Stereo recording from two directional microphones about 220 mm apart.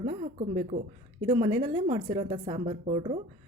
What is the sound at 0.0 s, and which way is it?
A woman's voice, 25° right (ahead or behind).